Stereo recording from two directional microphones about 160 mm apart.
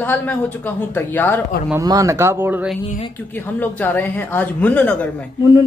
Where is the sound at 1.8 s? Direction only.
20° right (ahead or behind).